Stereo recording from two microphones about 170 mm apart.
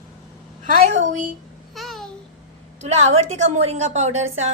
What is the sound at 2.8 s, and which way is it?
A woman's voice, 40° right (ahead or behind).